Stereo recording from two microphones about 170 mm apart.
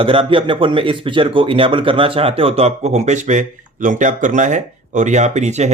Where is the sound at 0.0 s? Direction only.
30° right (ahead or behind).